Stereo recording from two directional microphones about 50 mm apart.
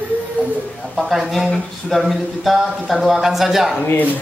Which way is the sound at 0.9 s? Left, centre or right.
Centre.